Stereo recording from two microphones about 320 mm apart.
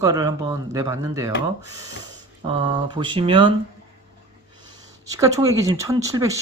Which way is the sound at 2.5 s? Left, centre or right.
Centre.